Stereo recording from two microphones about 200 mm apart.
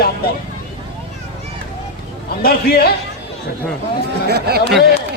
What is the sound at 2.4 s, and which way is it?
Speech, 50° left (ahead or behind).